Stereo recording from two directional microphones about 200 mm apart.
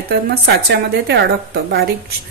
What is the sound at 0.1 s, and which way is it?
A woman's voice, 50° right (ahead or behind).